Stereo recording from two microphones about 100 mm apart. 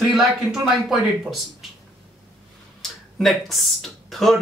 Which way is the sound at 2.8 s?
Centre (ahead or behind).